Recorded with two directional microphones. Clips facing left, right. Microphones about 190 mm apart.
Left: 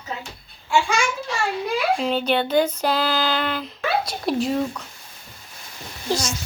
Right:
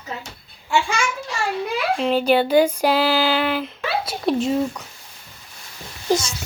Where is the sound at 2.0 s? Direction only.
5° right (ahead or behind).